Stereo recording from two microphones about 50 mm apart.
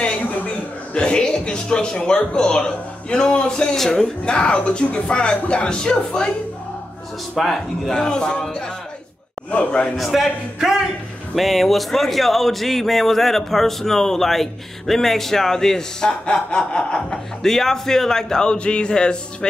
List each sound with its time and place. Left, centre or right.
0.9 s a man's voice: centre
3.7 s a man's voice: centre
4.2 s speech: left
7.3 s speech: centre
7.9 s a man's voice: centre
9.9 s speech: centre
11.3 s a man's voice: centre